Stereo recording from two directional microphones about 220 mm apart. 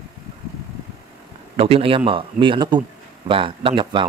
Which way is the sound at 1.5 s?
25° right (ahead or behind).